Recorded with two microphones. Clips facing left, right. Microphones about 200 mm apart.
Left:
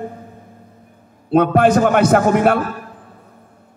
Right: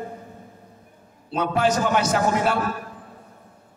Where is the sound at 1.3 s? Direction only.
55° left (ahead or behind).